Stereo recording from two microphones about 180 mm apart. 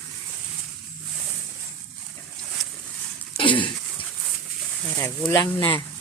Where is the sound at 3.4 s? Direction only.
25° left (ahead or behind).